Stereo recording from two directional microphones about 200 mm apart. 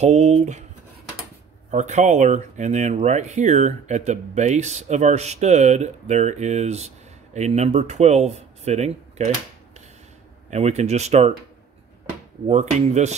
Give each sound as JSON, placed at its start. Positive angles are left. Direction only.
{"t": 0.0, "sound": "speech", "side_deg": -35}
{"t": 1.7, "sound": "speech", "side_deg": -35}
{"t": 10.5, "sound": "speech", "side_deg": -35}
{"t": 12.4, "sound": "speech", "side_deg": -35}